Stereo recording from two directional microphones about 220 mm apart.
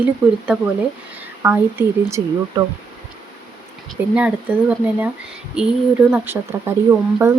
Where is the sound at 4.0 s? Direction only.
10° right (ahead or behind).